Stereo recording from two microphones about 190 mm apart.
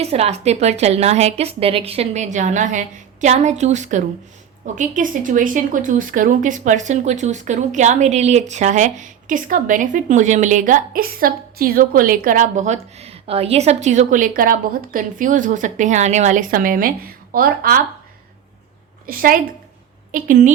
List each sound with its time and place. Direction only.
0.0 s speech: 35° right (ahead or behind); by 17.8 s 50° right (ahead or behind)
19.0 s a woman's voice: 50° right (ahead or behind)